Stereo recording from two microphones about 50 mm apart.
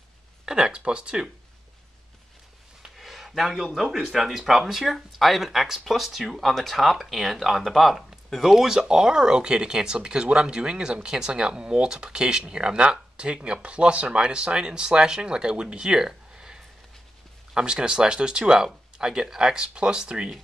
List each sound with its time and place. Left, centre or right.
0.5 s speech: centre
2.8 s a sound: centre
3.7 s speech: centre
17.6 s speech: centre